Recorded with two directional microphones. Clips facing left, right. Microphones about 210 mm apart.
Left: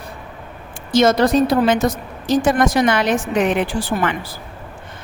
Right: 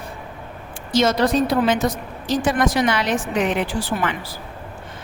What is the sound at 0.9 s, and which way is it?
A woman's voice, 50° left (ahead or behind).